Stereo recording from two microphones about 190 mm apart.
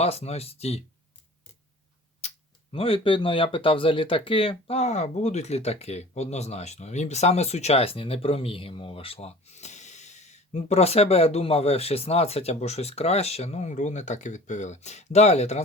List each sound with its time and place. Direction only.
0.0 s speech: 35° left (ahead or behind)
2.7 s speech: 30° left (ahead or behind)